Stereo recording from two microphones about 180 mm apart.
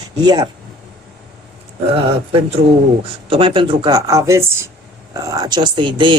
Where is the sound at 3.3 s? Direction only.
30° right (ahead or behind).